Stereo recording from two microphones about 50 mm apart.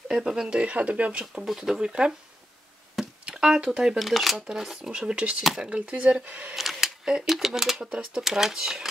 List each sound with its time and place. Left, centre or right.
0.1 s speech: centre
0.6 s speech: right
1.3 s speech: centre
1.9 s speech: centre
3.3 s speech: centre
4.0 s speech: centre
4.5 s speech: centre
4.9 s speech: centre
6.2 s speech: right
6.5 s camera: centre
7.2 s speech: centre